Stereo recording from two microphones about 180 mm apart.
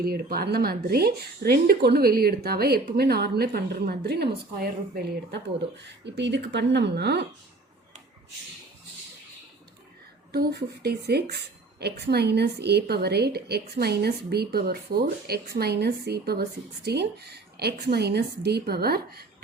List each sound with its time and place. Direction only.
0.0 s a woman's voice: 55° right (ahead or behind)
5.8 s speech: 75° right (ahead or behind)
10.3 s a woman's voice: 60° right (ahead or behind)